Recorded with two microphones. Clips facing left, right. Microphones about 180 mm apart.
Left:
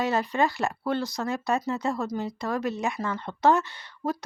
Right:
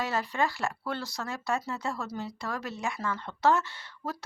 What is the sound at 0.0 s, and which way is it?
Speech, 20° left (ahead or behind).